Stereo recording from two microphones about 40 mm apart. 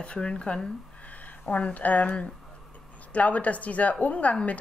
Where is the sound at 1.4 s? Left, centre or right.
Left.